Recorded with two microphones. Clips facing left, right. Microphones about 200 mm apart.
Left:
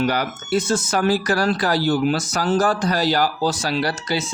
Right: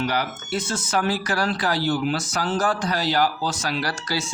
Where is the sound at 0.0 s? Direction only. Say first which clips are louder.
Left 4 dB; 45° left (ahead or behind).